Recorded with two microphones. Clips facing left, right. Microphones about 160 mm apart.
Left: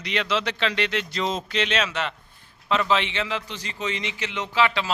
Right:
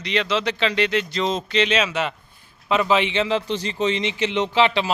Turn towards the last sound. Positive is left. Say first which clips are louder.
# right 5 dB
turn(degrees=-20)  # may be behind; listen again after turning